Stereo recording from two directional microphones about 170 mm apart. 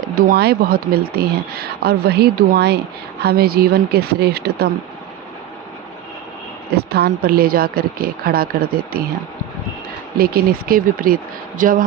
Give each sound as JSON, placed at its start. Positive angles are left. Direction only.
{"t": 0.2, "sound": "speech", "side_deg": -60}
{"t": 6.7, "sound": "a woman's voice", "side_deg": -70}
{"t": 10.7, "sound": "a woman's voice", "side_deg": -55}